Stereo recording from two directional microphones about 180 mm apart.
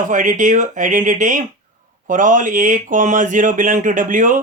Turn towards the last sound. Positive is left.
turn(degrees=-45)  # may be behind; listen again after turning